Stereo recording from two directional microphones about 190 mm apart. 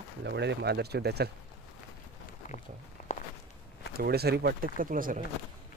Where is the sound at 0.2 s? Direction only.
60° right (ahead or behind).